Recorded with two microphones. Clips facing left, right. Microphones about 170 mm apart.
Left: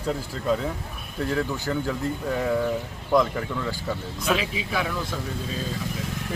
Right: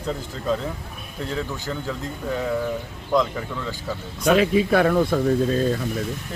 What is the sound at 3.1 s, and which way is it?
Speech, 5° left (ahead or behind).